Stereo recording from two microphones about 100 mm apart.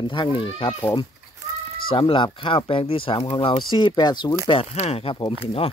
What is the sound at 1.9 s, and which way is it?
Speech, 60° left (ahead or behind).